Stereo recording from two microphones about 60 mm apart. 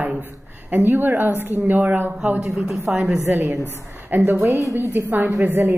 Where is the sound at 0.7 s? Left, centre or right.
Right.